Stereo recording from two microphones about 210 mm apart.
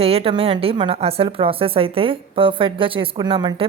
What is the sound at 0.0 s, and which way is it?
A woman's voice, 30° right (ahead or behind).